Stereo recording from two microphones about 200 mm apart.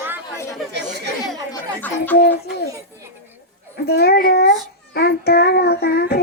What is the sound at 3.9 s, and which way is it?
Speech, 55° left (ahead or behind).